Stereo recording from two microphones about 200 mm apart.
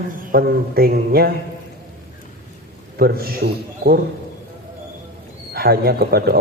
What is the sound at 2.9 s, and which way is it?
A man's voice, 50° right (ahead or behind).